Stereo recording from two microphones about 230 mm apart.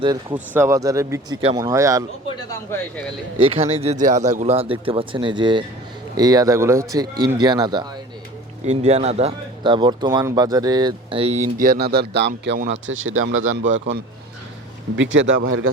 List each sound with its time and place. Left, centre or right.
0.0 s speech: right
0.3 s speech: centre
2.3 s a sound: centre
3.3 s speech: right
8.6 s speech: right
15.4 s a man's voice: right